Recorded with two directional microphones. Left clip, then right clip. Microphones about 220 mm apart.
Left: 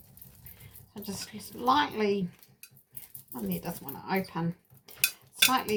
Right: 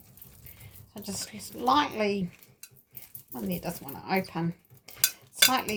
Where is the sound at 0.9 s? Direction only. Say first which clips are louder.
Right 2 dB; 30° right (ahead or behind).